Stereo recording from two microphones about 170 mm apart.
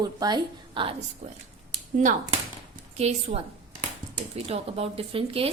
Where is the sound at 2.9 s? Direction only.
35° right (ahead or behind).